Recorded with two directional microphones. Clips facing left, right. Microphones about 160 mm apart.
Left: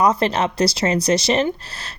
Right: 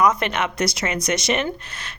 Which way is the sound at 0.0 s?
30° left (ahead or behind).